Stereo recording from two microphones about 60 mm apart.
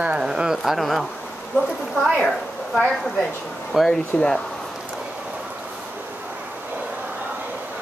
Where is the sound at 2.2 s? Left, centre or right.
Centre.